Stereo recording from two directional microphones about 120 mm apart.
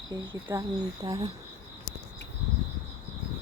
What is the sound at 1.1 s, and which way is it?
Cricket, 35° right (ahead or behind).